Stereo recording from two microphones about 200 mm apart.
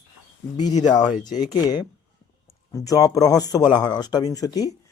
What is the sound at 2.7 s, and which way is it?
Speech, 15° left (ahead or behind).